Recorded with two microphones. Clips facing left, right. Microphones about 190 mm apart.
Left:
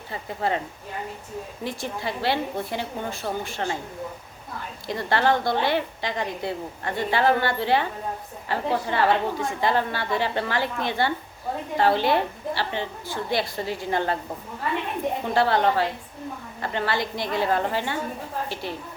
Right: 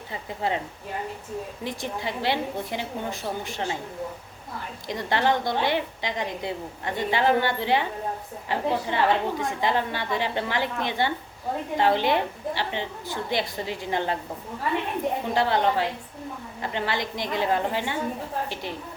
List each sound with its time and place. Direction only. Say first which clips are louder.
0.1 s a woman's voice: left 2 dB; 15° right (ahead or behind)
1.6 s a woman's voice: left 3 dB; 20° right (ahead or behind)
4.9 s a woman's voice: left 2 dB; 20° right (ahead or behind)
15.3 s a woman's voice: left 3 dB; 15° right (ahead or behind)